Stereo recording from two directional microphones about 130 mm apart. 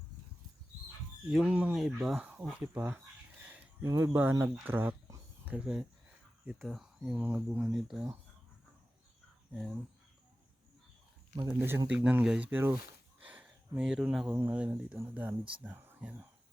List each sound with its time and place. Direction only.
1.3 s speech: 5° right (ahead or behind)
1.8 s speech: centre (ahead or behind)
2.4 s speech: 10° right (ahead or behind)
7.7 s speech: centre (ahead or behind)
9.5 s speech: centre (ahead or behind)
11.3 s speech: 15° right (ahead or behind)
13.1 s a sound: 10° right (ahead or behind)
14.3 s speech: 15° right (ahead or behind)